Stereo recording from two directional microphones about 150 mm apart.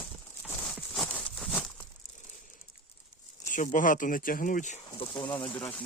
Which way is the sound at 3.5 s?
60° left (ahead or behind).